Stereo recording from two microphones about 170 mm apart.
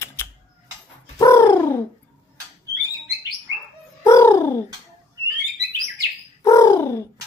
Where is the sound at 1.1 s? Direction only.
20° left (ahead or behind).